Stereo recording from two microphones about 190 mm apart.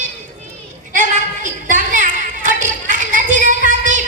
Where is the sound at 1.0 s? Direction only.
40° right (ahead or behind).